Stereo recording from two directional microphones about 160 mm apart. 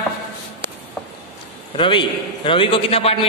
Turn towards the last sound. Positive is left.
turn(degrees=40)  # may be behind; listen again after turning